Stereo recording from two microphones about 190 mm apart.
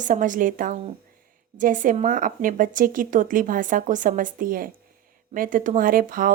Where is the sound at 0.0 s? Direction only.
45° right (ahead or behind).